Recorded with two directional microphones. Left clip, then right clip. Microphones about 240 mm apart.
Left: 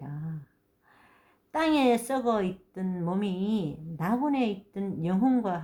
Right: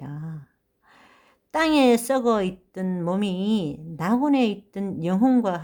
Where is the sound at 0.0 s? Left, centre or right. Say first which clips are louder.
Right 4 dB; right.